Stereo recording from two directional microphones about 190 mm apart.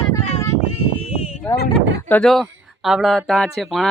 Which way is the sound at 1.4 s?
5° left (ahead or behind).